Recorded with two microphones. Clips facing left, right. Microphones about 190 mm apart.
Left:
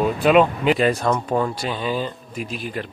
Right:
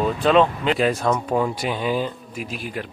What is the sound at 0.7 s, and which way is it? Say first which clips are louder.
Speech: left 1 dB; centre (ahead or behind).